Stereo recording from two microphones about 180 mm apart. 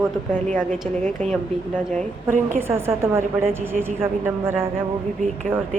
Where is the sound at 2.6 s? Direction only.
15° right (ahead or behind).